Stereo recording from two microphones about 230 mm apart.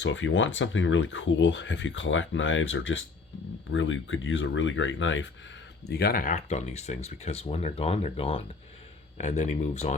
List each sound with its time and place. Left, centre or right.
0.0 s speech: left
5.9 s speech: left